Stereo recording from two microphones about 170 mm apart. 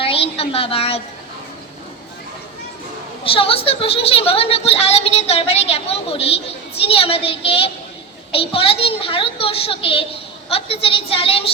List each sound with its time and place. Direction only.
0.0 s a woman's voice: 35° left (ahead or behind)
3.2 s a woman's voice: 35° left (ahead or behind)